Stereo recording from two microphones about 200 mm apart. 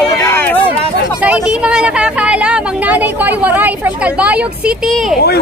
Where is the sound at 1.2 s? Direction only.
5° right (ahead or behind).